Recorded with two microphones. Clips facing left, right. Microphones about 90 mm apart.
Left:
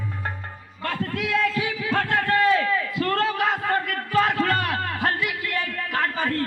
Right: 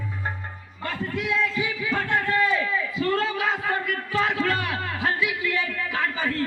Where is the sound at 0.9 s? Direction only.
65° left (ahead or behind).